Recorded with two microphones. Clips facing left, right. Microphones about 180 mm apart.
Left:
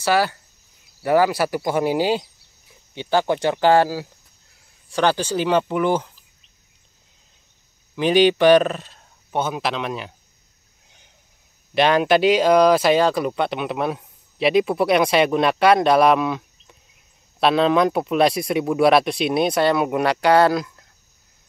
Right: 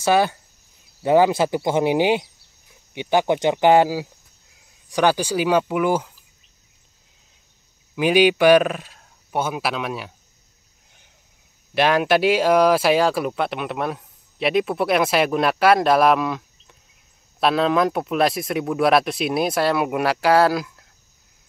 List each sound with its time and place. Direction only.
0.0 s speech: 20° right (ahead or behind)
7.9 s speech: 10° right (ahead or behind)
11.7 s speech: 5° right (ahead or behind)